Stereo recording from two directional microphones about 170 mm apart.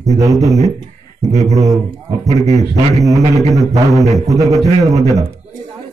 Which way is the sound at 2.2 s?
40° right (ahead or behind).